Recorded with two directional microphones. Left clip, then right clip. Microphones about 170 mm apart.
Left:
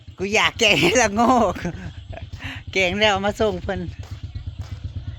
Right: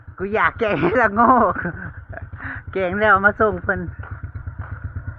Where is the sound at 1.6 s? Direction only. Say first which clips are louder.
Right 4 dB; 40° left (ahead or behind).